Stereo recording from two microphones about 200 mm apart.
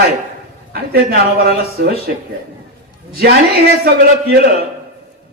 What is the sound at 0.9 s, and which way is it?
Speech, 50° right (ahead or behind).